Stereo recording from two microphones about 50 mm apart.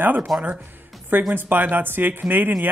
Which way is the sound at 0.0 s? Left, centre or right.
Right.